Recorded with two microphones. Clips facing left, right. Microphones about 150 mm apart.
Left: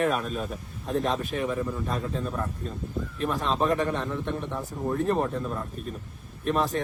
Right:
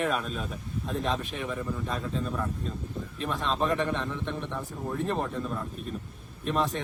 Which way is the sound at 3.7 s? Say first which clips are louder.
Left 2 dB; 45° left (ahead or behind).